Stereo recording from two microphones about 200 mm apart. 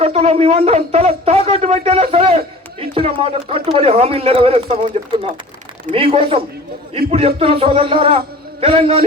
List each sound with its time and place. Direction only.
0.0 s speech: 30° right (ahead or behind)